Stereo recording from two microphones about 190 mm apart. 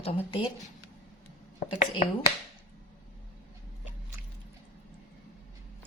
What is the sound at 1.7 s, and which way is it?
Speech, 30° left (ahead or behind).